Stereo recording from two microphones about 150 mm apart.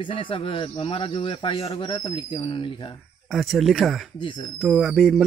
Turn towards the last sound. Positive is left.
turn(degrees=0)  # may be behind; listen again after turning